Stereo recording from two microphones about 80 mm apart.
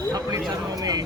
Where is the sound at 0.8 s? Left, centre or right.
Right.